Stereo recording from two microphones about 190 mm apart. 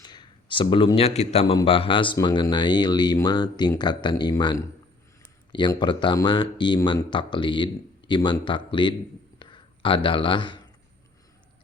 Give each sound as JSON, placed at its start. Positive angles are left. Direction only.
{"t": 0.0, "sound": "a man's voice", "side_deg": 20}